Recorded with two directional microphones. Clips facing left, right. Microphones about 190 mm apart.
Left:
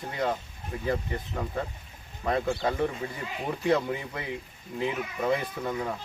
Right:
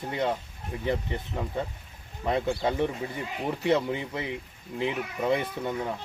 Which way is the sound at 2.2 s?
20° right (ahead or behind).